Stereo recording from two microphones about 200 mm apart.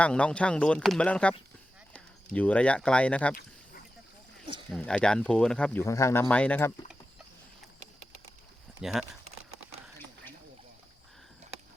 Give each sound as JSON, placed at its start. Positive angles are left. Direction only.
{"t": 0.0, "sound": "speech", "side_deg": 5}
{"t": 3.3, "sound": "a sound", "side_deg": 45}
{"t": 4.7, "sound": "speech", "side_deg": 5}
{"t": 8.8, "sound": "speech", "side_deg": 0}